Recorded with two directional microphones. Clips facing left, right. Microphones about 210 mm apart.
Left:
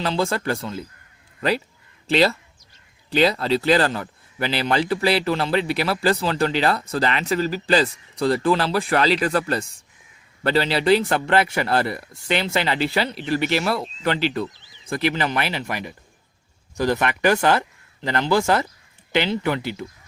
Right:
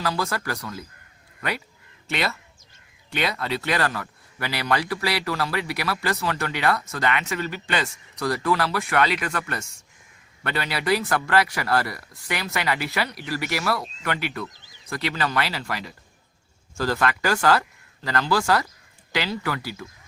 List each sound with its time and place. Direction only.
0.0 s speech: 25° left (ahead or behind)